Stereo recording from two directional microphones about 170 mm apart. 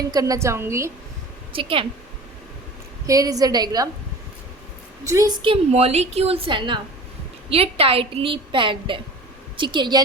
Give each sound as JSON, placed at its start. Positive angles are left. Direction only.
{"t": 0.1, "sound": "a woman's voice", "side_deg": -20}
{"t": 1.5, "sound": "a woman's voice", "side_deg": -30}
{"t": 3.1, "sound": "a woman's voice", "side_deg": -20}
{"t": 5.0, "sound": "a woman's voice", "side_deg": -20}